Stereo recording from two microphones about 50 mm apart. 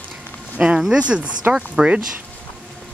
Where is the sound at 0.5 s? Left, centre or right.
Right.